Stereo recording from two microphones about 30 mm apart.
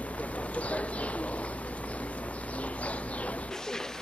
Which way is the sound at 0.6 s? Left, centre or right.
Left.